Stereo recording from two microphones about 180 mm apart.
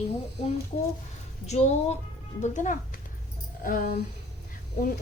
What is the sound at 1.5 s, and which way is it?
A woman's voice, 40° left (ahead or behind).